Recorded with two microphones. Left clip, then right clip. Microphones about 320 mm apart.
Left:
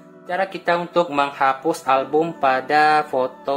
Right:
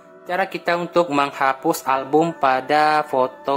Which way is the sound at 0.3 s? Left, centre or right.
Centre.